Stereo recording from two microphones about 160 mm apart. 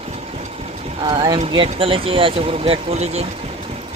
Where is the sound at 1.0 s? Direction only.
25° right (ahead or behind).